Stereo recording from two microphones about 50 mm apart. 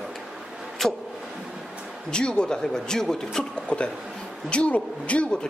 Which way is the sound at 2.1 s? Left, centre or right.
Centre.